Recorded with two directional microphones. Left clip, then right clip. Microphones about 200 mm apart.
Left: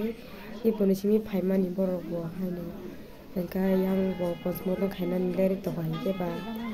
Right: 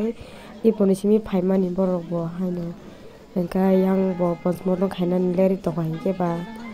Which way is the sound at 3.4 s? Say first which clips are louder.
Right 8 dB; 20° right (ahead or behind).